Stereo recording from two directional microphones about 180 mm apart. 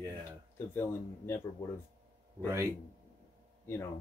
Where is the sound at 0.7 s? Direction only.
10° left (ahead or behind).